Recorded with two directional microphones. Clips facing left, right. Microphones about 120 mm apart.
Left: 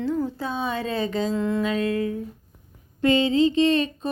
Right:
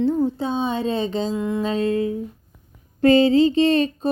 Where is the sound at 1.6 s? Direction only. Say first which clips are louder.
Right 3 dB; 30° right (ahead or behind).